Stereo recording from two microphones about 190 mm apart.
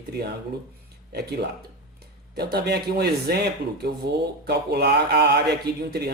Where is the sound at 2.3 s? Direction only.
55° right (ahead or behind).